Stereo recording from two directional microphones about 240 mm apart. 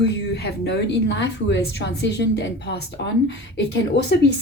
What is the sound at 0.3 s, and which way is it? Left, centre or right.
A woman's voice, left.